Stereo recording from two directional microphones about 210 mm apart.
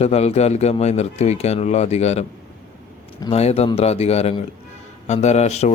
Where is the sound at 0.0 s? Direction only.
30° left (ahead or behind).